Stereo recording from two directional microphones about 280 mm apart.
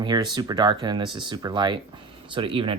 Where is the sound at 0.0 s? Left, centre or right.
Centre.